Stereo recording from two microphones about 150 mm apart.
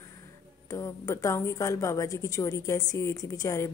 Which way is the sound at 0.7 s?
20° left (ahead or behind).